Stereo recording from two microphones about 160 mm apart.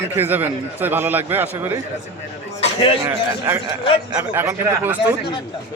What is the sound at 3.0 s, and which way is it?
A man's voice, 15° right (ahead or behind).